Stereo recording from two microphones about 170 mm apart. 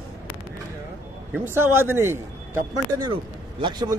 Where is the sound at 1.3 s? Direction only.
15° right (ahead or behind).